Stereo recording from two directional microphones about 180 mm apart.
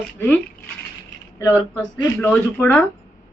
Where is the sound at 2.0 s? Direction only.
15° left (ahead or behind).